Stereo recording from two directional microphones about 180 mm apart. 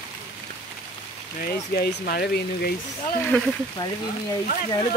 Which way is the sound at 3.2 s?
10° left (ahead or behind).